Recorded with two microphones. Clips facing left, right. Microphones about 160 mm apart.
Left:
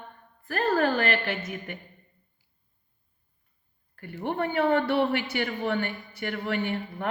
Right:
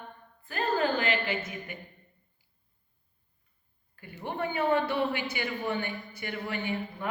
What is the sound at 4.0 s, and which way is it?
Speech, 65° left (ahead or behind).